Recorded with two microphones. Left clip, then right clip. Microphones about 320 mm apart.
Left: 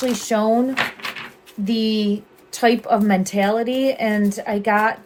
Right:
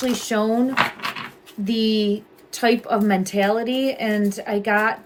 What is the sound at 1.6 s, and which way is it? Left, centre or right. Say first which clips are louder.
Speech: even; centre.